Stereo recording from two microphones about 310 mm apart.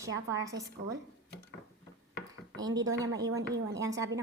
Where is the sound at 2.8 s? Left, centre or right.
Centre.